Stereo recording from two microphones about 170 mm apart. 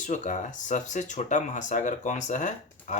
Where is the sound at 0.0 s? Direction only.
50° left (ahead or behind).